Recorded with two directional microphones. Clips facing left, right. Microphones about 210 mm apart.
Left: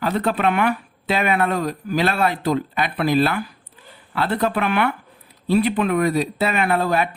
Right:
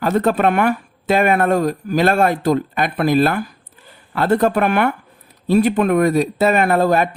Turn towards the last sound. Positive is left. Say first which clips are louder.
# right 5 dB
turn(degrees=-45)  # may be behind; listen again after turning